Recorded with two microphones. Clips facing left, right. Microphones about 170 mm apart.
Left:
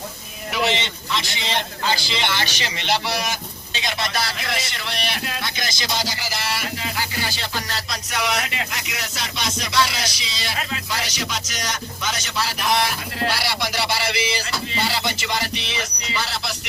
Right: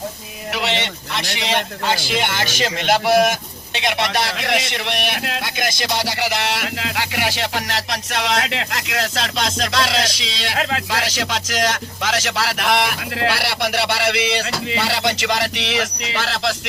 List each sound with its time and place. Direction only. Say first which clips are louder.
0.5 s a man's voice: even; 70° right (ahead or behind); by 3.3 s 50° right (ahead or behind)
3.8 s a man's voice: right 5 dB; 70° right (ahead or behind)
5.5 s speech: right 6 dB; 55° right (ahead or behind); by 16.6 s 90° right